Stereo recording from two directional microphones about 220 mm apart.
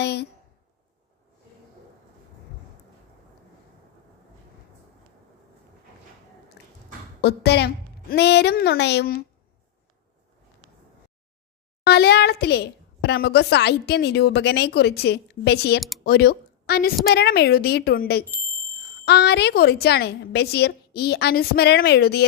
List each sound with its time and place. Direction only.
0.0 s a sound: 50° left (ahead or behind)
7.2 s a woman's voice: 50° left (ahead or behind)
11.9 s a woman's voice: 45° left (ahead or behind)